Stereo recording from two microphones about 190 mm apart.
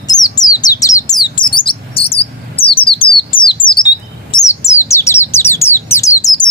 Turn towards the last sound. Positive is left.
turn(degrees=15)  # may be behind; listen again after turning